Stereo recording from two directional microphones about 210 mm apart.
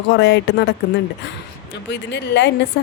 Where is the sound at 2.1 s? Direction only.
55° left (ahead or behind).